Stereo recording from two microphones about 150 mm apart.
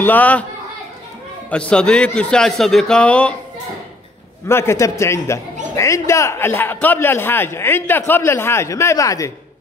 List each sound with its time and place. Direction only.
0.0 s a man's voice: 10° left (ahead or behind)
1.5 s a man's voice: 5° left (ahead or behind)
4.5 s a man's voice: 15° left (ahead or behind)